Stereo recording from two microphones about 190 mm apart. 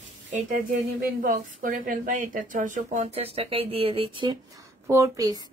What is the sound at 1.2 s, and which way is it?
Speech, 50° right (ahead or behind).